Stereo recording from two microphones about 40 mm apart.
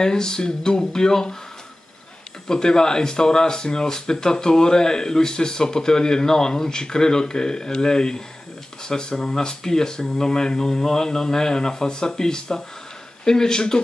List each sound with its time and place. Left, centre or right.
0.0 s speech: centre
2.4 s speech: centre